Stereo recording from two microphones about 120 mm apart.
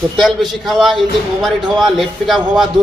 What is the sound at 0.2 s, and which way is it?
A man's voice, centre (ahead or behind).